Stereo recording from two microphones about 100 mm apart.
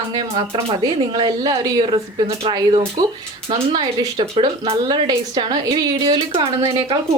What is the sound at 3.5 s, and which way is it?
Speech, 70° right (ahead or behind).